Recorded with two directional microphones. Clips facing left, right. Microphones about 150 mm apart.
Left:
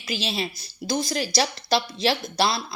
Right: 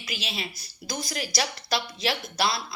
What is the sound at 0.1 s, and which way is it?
Speech, 30° left (ahead or behind).